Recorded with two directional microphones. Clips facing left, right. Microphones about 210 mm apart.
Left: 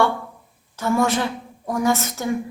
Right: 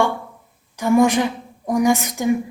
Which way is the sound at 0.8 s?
15° right (ahead or behind).